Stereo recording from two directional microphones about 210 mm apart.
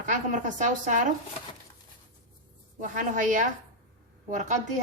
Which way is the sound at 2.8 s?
35° right (ahead or behind).